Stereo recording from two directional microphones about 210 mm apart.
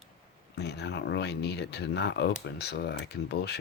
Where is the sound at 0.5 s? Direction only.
50° left (ahead or behind).